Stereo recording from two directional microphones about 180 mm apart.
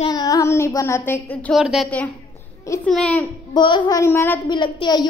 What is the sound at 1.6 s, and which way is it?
A woman's voice, centre (ahead or behind).